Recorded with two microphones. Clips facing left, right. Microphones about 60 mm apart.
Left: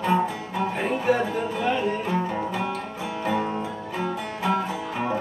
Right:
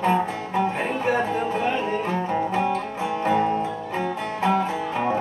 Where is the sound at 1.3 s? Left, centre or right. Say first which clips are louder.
Right 1 dB; right.